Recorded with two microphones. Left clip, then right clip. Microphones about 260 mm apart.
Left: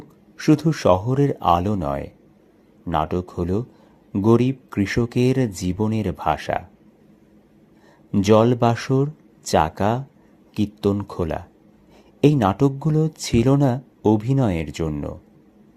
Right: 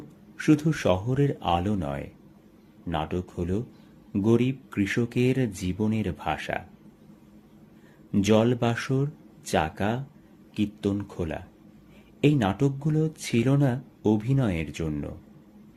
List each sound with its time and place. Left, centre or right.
0.3 s speech: left
8.1 s speech: left